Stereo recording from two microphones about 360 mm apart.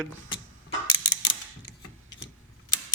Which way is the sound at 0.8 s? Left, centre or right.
Left.